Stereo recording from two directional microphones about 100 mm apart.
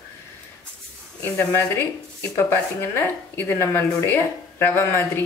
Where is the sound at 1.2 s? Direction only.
25° left (ahead or behind).